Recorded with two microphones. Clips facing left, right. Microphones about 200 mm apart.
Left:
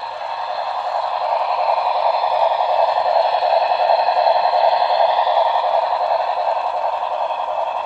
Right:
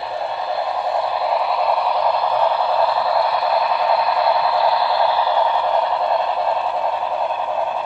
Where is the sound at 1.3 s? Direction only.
Centre (ahead or behind).